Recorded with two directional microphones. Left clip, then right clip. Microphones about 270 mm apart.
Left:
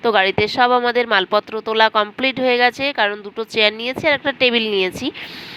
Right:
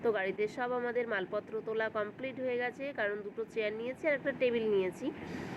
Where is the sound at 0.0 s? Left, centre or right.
Left.